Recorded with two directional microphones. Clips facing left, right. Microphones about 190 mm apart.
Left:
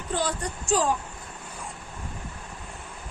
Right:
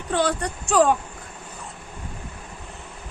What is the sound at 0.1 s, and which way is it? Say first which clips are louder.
Speech: right 6 dB; 70° right (ahead or behind).